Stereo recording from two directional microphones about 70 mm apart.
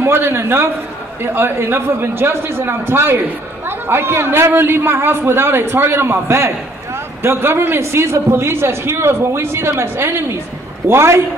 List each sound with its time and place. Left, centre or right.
0.0 s a man's voice: right